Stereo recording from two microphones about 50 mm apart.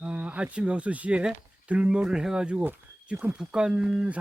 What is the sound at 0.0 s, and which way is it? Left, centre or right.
Speech, right.